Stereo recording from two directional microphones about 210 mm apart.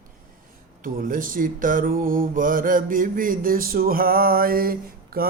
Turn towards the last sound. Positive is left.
turn(degrees=-45)  # may be behind; listen again after turning